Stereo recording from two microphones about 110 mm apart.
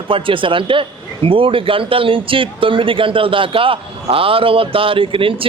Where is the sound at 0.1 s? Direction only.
50° right (ahead or behind).